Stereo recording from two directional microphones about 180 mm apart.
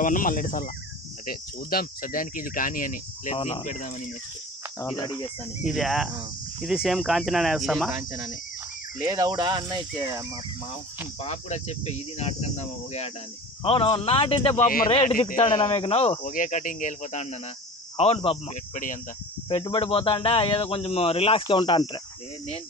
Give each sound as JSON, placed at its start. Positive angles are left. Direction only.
{"t": 0.0, "sound": "speech", "side_deg": 50}
{"t": 3.3, "sound": "speech", "side_deg": 30}
{"t": 4.8, "sound": "speech", "side_deg": 25}
{"t": 5.7, "sound": "speech", "side_deg": 0}
{"t": 9.0, "sound": "speech", "side_deg": -20}
{"t": 11.1, "sound": "speech", "side_deg": 35}
{"t": 16.3, "sound": "speech", "side_deg": 45}
{"t": 18.5, "sound": "speech", "side_deg": 45}
{"t": 19.5, "sound": "speech", "side_deg": 30}